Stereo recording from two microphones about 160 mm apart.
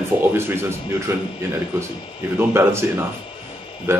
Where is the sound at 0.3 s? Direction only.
15° right (ahead or behind).